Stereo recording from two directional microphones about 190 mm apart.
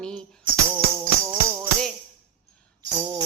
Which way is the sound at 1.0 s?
15° right (ahead or behind).